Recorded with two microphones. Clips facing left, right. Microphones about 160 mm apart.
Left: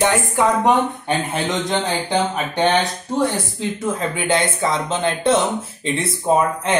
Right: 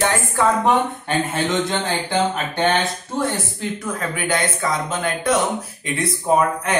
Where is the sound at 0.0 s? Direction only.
15° left (ahead or behind).